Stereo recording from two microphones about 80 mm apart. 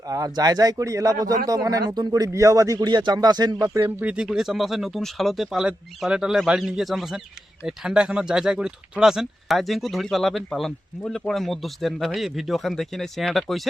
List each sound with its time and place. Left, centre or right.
0.1 s a man's voice: right
4.0 s speech: centre
4.4 s speech: centre